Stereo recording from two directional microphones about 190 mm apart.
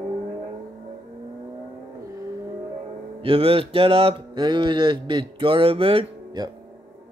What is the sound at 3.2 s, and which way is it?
Speech, 30° right (ahead or behind).